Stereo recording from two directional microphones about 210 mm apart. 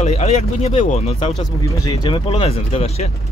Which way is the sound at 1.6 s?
15° left (ahead or behind).